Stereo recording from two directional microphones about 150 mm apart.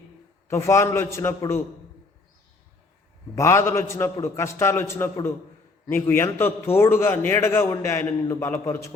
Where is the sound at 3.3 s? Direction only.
20° left (ahead or behind).